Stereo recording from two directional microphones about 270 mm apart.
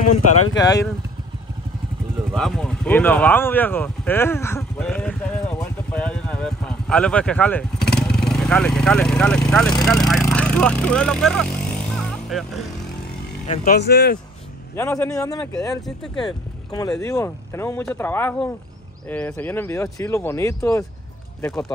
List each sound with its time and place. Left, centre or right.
0.1 s speech: left
2.3 s speech: centre
5.6 s a sound: centre
9.8 s speech: centre
13.5 s speech: left
14.8 s speech: centre